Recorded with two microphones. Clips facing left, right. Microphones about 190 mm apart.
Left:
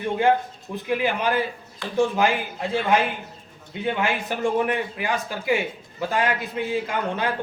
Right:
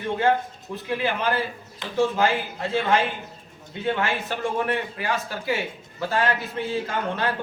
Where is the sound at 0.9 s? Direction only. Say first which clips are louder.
Left 2 dB; 15° left (ahead or behind).